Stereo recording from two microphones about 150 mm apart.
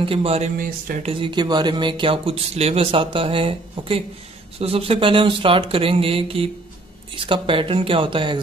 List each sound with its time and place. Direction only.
0.0 s speech: 40° right (ahead or behind)